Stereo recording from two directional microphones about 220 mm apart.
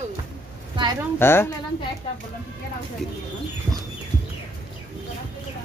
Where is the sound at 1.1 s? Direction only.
10° left (ahead or behind).